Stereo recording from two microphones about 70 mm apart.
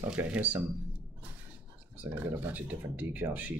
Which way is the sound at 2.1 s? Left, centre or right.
Right.